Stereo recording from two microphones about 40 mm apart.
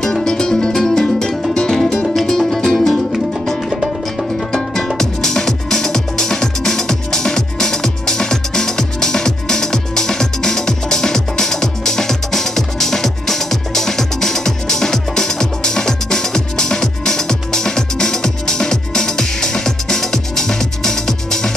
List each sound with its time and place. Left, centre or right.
0.0 s music: centre
3.7 s music: centre
4.5 s music: centre